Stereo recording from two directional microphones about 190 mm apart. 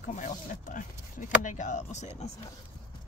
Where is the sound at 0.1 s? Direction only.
45° left (ahead or behind).